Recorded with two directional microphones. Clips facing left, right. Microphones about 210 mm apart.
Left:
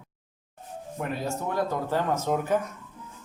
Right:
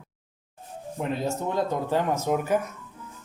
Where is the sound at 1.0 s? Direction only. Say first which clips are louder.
Right 3 dB; 20° right (ahead or behind).